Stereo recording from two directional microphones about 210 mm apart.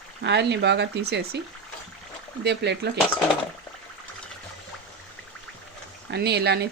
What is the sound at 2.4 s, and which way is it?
Speech, 55° right (ahead or behind).